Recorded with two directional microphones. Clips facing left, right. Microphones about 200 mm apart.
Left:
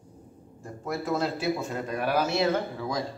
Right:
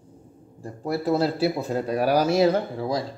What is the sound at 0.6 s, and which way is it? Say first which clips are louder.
A man's voice: right 6 dB; 35° right (ahead or behind).